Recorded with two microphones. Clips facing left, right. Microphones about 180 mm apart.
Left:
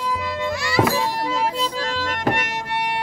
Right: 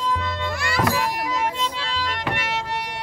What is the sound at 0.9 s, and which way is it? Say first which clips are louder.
Music: left 2 dB; 30° left (ahead or behind).